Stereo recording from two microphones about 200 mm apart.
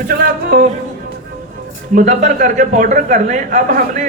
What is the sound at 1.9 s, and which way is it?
A man's voice, 35° right (ahead or behind).